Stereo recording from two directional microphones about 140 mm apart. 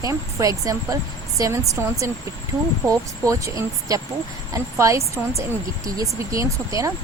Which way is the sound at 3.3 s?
20° right (ahead or behind).